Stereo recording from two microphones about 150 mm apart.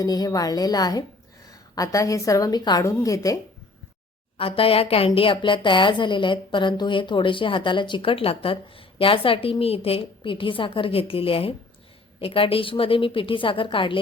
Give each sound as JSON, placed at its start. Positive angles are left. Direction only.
{"t": 0.0, "sound": "a woman's voice", "side_deg": 25}
{"t": 4.4, "sound": "a woman's voice", "side_deg": 40}